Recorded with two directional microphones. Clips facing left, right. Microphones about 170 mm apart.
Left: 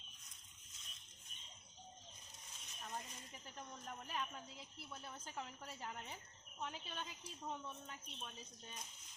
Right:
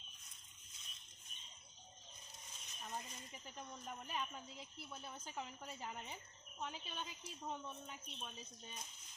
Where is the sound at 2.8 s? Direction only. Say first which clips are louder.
Right 1 dB; 5° right (ahead or behind).